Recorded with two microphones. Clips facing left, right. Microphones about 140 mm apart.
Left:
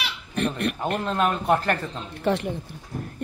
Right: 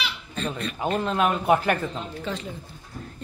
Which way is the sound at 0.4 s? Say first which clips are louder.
Left 5 dB; 65° left (ahead or behind).